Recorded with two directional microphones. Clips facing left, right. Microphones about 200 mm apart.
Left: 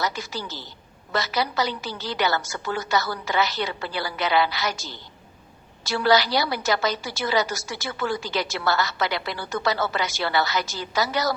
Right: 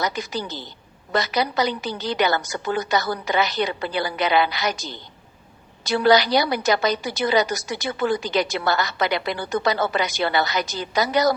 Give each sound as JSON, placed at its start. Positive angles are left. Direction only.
{"t": 0.0, "sound": "a woman's voice", "side_deg": -15}